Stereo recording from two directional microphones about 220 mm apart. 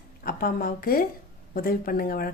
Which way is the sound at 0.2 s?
40° left (ahead or behind).